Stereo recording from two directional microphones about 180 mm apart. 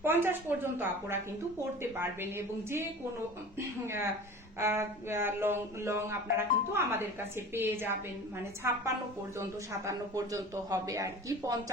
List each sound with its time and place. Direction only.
0.0 s speech: 10° right (ahead or behind)
4.6 s speech: 15° right (ahead or behind)
9.8 s speech: 15° right (ahead or behind)